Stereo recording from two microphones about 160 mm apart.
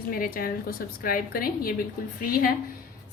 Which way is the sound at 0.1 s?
65° left (ahead or behind).